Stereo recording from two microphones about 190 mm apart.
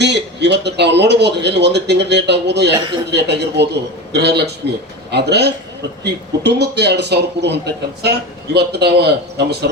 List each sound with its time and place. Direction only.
0.0 s speech: 65° right (ahead or behind)